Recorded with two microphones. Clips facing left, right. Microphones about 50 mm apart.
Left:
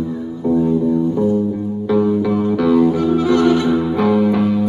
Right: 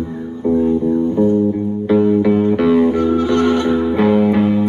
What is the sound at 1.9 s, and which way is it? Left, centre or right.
Music, right.